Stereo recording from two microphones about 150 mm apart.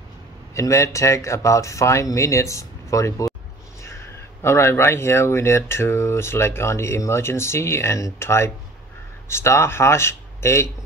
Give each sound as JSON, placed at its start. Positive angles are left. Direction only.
{"t": 0.6, "sound": "speech", "side_deg": 20}